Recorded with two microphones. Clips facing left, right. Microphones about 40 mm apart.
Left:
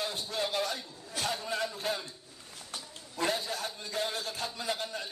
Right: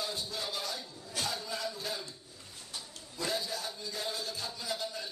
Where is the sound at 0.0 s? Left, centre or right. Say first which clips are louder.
Left 4 dB; left.